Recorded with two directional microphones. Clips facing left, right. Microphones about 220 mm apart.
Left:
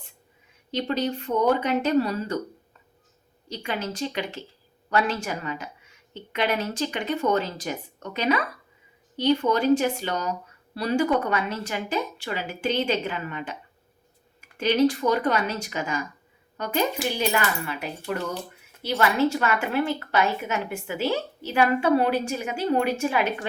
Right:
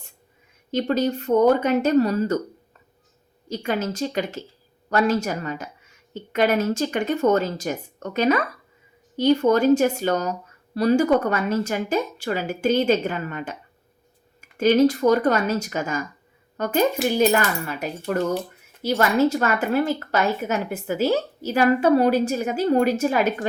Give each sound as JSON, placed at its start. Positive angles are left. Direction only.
{"t": 0.7, "sound": "speech", "side_deg": -45}
{"t": 3.5, "sound": "speech", "side_deg": -45}
{"t": 14.6, "sound": "a woman's voice", "side_deg": -45}